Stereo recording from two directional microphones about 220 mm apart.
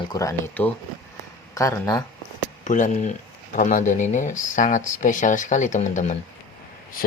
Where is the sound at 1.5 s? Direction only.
15° left (ahead or behind).